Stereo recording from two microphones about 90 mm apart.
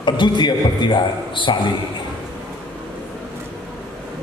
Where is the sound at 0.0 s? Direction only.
55° left (ahead or behind).